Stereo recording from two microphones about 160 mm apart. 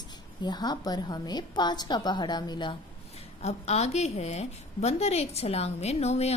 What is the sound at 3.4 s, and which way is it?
A woman's voice, 45° left (ahead or behind).